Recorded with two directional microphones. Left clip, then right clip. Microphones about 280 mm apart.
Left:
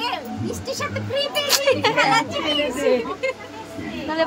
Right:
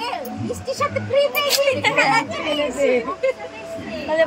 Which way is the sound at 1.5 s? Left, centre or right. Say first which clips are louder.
Even; centre.